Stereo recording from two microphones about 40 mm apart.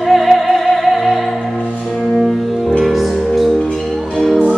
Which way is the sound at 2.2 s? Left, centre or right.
Centre.